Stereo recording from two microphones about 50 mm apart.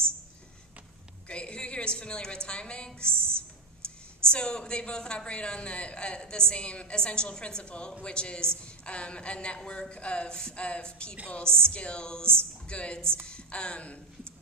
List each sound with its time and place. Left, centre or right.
1.3 s a man's voice: left
4.3 s a man's voice: centre